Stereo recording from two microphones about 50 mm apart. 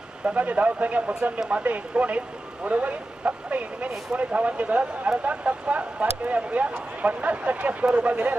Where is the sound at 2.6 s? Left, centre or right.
Right.